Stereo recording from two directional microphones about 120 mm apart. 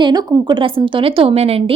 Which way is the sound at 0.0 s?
35° right (ahead or behind).